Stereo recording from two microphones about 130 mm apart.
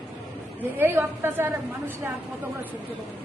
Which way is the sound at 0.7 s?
20° right (ahead or behind).